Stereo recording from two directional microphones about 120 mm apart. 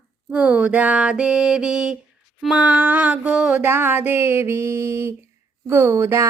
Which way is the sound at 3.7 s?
20° right (ahead or behind).